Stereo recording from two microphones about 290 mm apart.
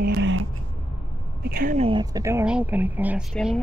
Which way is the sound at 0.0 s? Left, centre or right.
Right.